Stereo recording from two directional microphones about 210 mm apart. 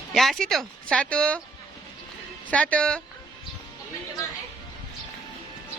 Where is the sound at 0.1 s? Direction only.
Centre (ahead or behind).